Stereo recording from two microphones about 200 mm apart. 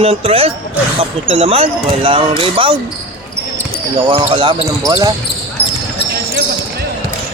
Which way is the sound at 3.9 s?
25° right (ahead or behind).